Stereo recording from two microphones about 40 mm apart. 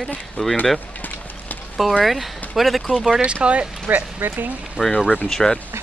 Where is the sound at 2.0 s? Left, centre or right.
Centre.